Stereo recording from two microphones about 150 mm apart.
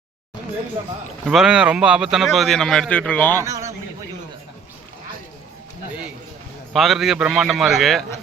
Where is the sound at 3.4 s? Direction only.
20° right (ahead or behind).